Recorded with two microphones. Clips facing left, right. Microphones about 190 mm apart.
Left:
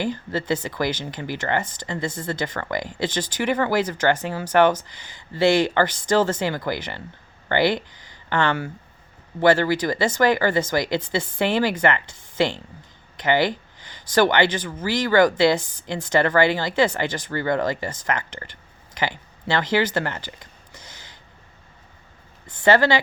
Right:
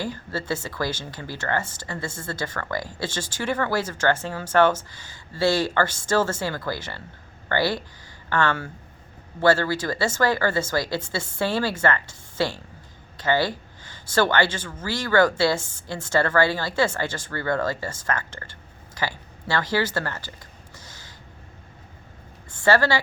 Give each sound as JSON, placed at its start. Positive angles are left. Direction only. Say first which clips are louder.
{"t": 0.0, "sound": "speech", "louder": "left 4 dB", "side_deg": 20}
{"t": 18.9, "sound": "a sound", "louder": "left 3 dB", "side_deg": 20}
{"t": 22.4, "sound": "a woman's voice", "louder": "left 3 dB", "side_deg": 20}